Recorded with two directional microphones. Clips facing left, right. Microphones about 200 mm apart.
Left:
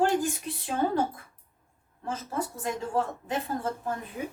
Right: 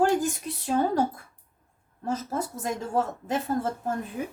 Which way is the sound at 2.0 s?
40° right (ahead or behind).